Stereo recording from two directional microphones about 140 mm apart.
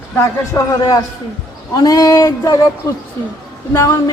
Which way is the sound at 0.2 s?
25° left (ahead or behind).